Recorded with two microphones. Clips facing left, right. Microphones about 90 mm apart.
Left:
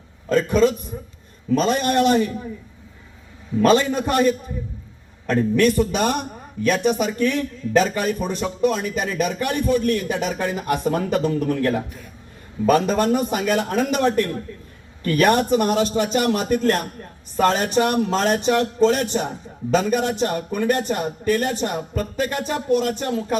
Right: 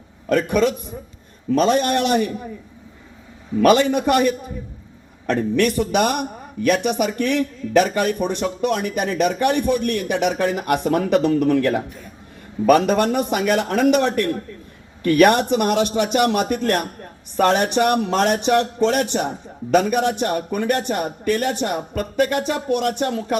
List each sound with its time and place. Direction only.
0.3 s speech: 60° right (ahead or behind)
3.6 s a man's voice: 70° right (ahead or behind)